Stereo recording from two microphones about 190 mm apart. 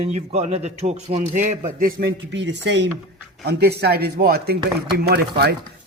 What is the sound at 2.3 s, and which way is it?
A man's voice, 65° right (ahead or behind).